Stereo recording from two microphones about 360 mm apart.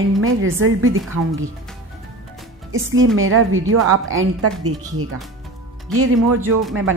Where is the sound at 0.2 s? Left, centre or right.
Right.